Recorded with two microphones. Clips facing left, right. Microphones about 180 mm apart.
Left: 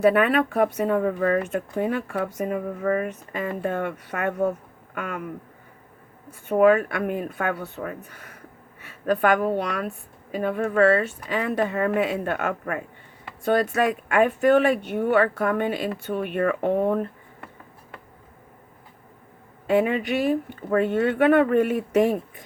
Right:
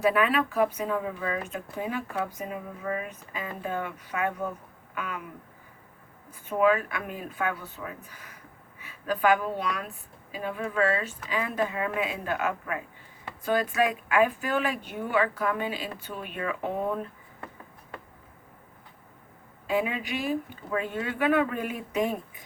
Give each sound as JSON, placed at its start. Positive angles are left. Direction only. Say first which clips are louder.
{"t": 0.1, "sound": "speech", "louder": "left 5 dB", "side_deg": 60}
{"t": 6.5, "sound": "speech", "louder": "left 6 dB", "side_deg": 55}
{"t": 13.4, "sound": "speech", "louder": "left 4 dB", "side_deg": 65}
{"t": 19.8, "sound": "speech", "louder": "left 8 dB", "side_deg": 60}